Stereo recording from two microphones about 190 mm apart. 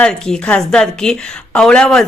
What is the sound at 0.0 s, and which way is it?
A woman's voice, 5° left (ahead or behind).